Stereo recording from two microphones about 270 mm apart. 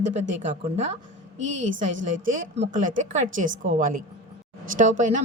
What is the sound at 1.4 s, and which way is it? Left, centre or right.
Speech, right.